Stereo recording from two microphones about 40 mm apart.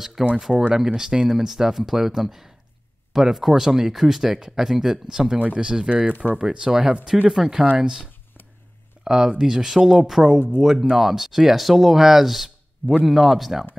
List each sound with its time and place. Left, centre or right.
0.0 s speech: centre